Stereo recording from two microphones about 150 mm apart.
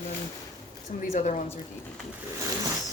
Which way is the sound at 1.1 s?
55° left (ahead or behind).